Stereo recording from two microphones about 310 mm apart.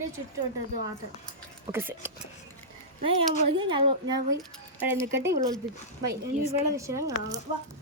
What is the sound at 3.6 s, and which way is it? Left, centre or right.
Speech, centre.